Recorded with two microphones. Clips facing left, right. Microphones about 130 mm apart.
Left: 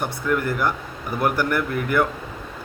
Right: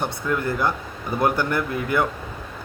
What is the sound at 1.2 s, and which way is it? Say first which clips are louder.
Speech: even; 25° right (ahead or behind).